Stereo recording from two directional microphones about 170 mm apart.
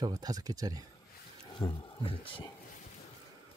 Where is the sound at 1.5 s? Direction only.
25° left (ahead or behind).